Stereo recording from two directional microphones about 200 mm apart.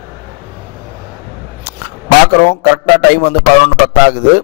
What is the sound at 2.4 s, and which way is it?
Speech, 50° left (ahead or behind).